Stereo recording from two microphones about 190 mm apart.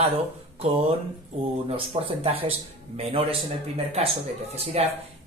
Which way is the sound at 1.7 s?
30° right (ahead or behind).